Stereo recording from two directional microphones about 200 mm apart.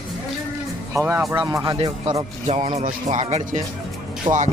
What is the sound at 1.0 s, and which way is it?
Speech, 10° right (ahead or behind).